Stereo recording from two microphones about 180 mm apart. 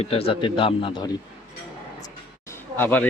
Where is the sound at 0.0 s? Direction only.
35° left (ahead or behind).